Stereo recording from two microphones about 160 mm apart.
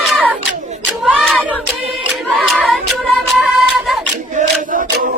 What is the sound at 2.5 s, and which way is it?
Music, centre (ahead or behind).